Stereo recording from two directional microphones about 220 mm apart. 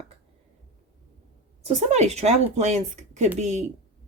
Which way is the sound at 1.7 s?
30° right (ahead or behind).